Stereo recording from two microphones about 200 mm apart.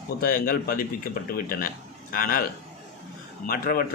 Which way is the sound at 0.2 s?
45° left (ahead or behind).